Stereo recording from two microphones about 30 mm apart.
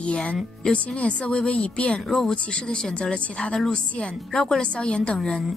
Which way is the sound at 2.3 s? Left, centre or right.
Left.